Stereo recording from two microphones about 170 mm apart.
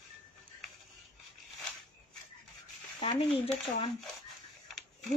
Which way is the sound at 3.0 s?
30° left (ahead or behind).